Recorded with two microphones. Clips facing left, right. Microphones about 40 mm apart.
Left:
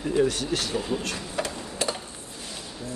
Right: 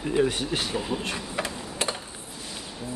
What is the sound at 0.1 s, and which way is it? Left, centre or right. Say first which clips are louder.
Speech: even; right.